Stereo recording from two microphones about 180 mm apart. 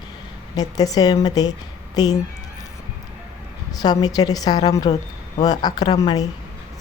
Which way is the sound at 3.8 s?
20° left (ahead or behind).